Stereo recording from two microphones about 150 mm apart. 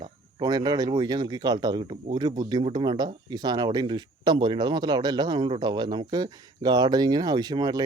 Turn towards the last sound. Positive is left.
turn(degrees=-30)  # may be behind; listen again after turning